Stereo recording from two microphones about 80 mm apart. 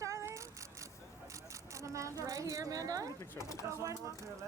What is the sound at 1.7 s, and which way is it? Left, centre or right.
Speech, right.